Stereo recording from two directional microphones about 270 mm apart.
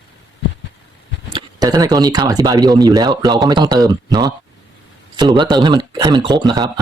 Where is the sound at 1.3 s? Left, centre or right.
Centre.